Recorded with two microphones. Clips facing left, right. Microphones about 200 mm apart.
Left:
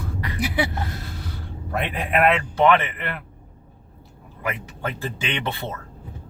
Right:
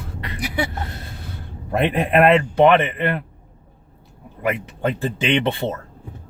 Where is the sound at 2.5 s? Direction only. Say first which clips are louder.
Right 4 dB; 25° right (ahead or behind).